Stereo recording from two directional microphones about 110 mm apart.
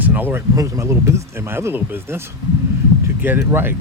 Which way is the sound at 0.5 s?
30° right (ahead or behind).